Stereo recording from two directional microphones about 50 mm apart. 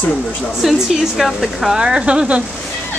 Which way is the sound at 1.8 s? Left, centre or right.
Centre.